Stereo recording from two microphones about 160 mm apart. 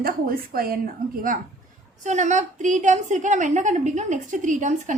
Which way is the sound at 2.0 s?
50° right (ahead or behind).